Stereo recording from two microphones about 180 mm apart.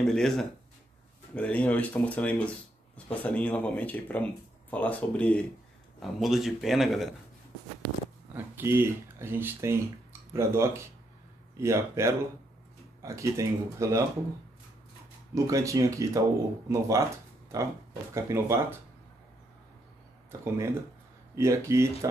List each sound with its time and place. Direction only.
0.1 s a man's voice: centre (ahead or behind)
8.4 s speech: 10° right (ahead or behind)
15.3 s speech: 15° right (ahead or behind)
21.4 s speech: 15° right (ahead or behind)